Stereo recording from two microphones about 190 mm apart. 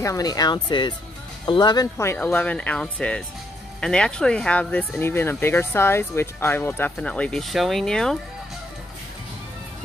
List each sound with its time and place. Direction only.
0.0 s speech: 20° left (ahead or behind); by 8.2 s 5° left (ahead or behind)